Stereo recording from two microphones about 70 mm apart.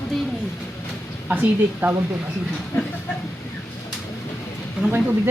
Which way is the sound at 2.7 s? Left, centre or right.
Left.